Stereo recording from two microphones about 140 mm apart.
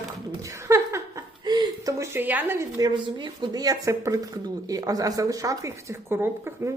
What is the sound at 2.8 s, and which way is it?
Speech, 35° right (ahead or behind).